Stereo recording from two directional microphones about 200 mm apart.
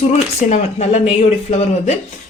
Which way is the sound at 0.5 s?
35° left (ahead or behind).